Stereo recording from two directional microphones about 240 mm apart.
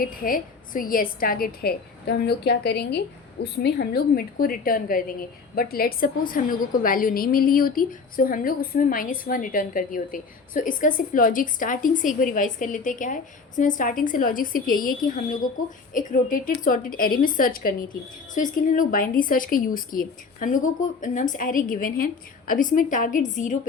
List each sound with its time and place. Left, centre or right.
0.0 s a woman's voice: left